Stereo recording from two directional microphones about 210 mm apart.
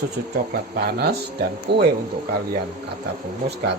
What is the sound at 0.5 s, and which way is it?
Speech, 50° right (ahead or behind).